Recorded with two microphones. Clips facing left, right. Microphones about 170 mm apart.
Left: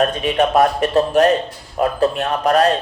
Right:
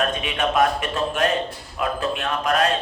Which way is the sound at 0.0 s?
40° left (ahead or behind).